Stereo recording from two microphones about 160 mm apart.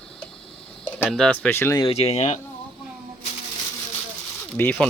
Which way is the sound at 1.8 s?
40° left (ahead or behind).